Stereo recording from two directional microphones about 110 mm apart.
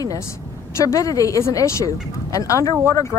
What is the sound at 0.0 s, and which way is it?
A woman's voice, 30° left (ahead or behind).